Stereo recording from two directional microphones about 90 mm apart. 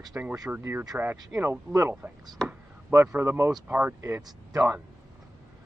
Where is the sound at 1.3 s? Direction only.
35° right (ahead or behind).